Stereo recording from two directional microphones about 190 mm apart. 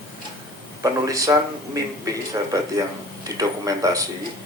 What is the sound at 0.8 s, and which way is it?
Speech, 15° right (ahead or behind).